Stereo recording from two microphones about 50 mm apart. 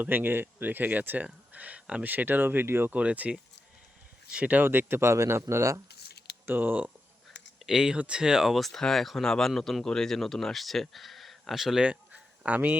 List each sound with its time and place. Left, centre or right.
0.0 s speech: right
2.0 s speech: right
2.9 s speech: right
4.6 s speech: right
5.0 s speech: right
6.4 s speech: right
7.6 s speech: centre
7.9 s speech: right
8.2 s speech: centre
8.5 s speech: centre
11.8 s a sound: right